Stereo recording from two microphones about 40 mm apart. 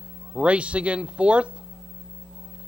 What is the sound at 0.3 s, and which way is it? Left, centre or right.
Speech, right.